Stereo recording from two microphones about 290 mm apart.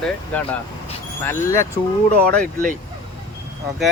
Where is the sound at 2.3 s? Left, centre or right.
Right.